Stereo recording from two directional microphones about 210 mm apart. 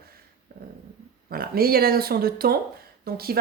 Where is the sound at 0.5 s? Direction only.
45° right (ahead or behind).